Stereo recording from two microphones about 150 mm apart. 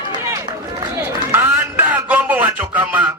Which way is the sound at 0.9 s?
15° right (ahead or behind).